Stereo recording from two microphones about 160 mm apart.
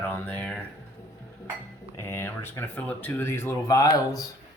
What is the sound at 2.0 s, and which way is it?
Speech, 15° left (ahead or behind).